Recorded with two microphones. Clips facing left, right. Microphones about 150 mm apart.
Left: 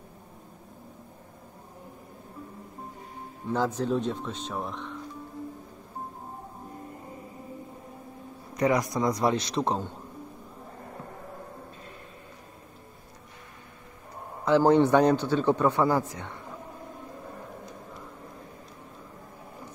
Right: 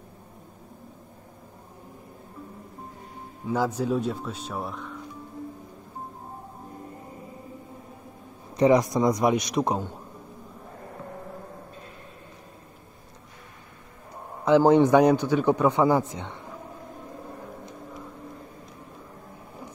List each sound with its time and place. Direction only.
3.4 s a man's voice: 10° right (ahead or behind)
8.5 s a man's voice: 25° right (ahead or behind)
14.4 s a man's voice: 15° right (ahead or behind)